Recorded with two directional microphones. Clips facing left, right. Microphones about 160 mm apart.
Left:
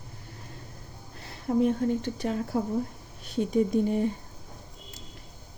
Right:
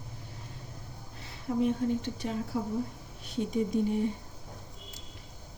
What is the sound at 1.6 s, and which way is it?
Speech, 55° left (ahead or behind).